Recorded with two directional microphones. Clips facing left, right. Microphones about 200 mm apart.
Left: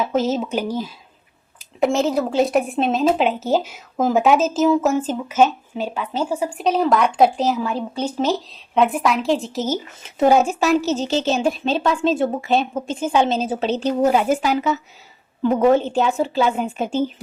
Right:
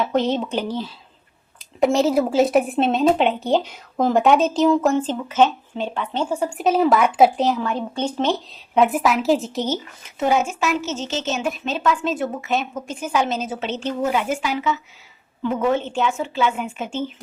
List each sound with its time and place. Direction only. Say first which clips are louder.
0.0 s a woman's voice: even; 5° left (ahead or behind)
10.2 s a woman's voice: left 5 dB; 35° left (ahead or behind)